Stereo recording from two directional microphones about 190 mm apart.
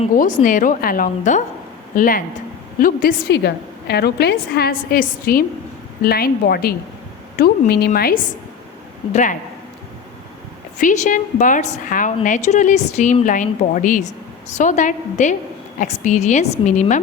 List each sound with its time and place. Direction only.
0.2 s a woman's voice: 45° left (ahead or behind)
10.8 s a woman's voice: 40° left (ahead or behind)